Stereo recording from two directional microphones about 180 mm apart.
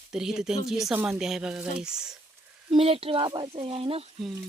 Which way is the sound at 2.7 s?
30° right (ahead or behind).